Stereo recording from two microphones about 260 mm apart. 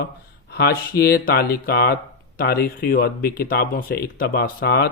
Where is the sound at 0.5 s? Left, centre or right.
Left.